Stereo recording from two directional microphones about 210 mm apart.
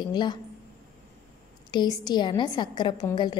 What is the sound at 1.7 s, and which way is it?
A woman's voice, 20° left (ahead or behind).